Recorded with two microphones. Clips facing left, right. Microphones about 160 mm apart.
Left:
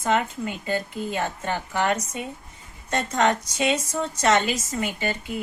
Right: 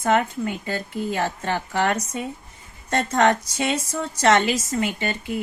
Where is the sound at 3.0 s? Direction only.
60° right (ahead or behind).